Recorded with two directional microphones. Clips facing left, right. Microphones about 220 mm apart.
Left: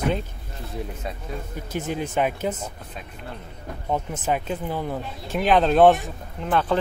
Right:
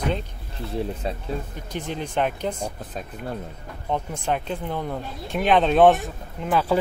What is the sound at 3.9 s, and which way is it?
Speech, 5° left (ahead or behind).